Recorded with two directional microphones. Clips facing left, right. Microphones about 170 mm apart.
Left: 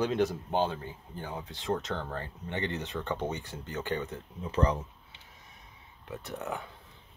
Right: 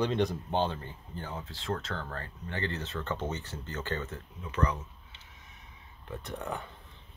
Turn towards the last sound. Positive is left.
turn(degrees=5)  # may be behind; listen again after turning